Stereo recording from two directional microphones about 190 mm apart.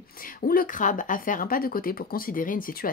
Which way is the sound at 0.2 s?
50° left (ahead or behind).